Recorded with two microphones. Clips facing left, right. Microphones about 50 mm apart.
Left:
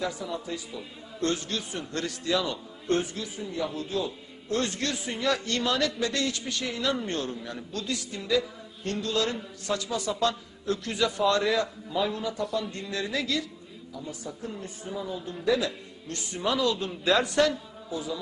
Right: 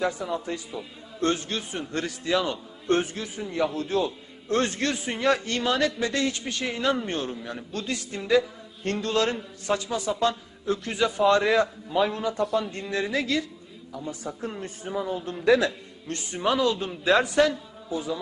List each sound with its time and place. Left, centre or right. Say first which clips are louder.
0.0 s a man's voice: right 5 dB; right
1.2 s a man's voice: right 3 dB; right
2.9 s a man's voice: right 3 dB; right
4.4 s a man's voice: right 4 dB; right; by 7.3 s centre
7.7 s a man's voice: right 1 dB; right
9.3 s a man's voice: right 3 dB; right
11.9 s a man's voice: right 4 dB; right
12.9 s a man's voice: right 4 dB; right
14.3 s a man's voice: right 4 dB; right
16.0 s a man's voice: right 3 dB; right; by 17.9 s centre
17.9 s a man's voice: right 3 dB; right